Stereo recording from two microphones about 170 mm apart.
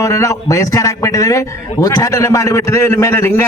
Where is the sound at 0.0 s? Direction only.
20° left (ahead or behind).